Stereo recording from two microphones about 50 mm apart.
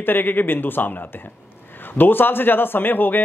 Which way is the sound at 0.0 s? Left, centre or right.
Left.